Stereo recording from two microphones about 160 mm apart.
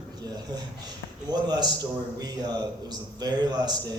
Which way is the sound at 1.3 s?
25° right (ahead or behind).